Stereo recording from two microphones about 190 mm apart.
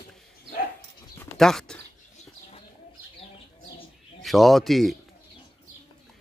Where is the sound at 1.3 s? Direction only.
Centre (ahead or behind).